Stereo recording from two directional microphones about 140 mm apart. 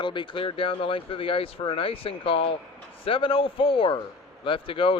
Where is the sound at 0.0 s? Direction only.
35° left (ahead or behind).